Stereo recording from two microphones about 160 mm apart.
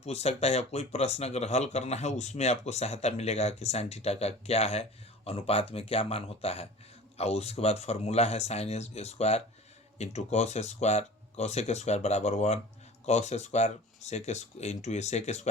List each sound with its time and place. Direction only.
0.0 s speech: 40° left (ahead or behind)